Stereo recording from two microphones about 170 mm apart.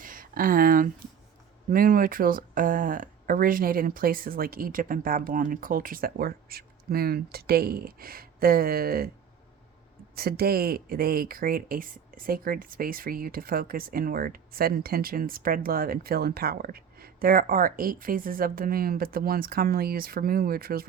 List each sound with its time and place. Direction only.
0.0 s a sound: 55° right (ahead or behind)
1.7 s speech: 55° right (ahead or behind)
10.2 s speech: 65° right (ahead or behind)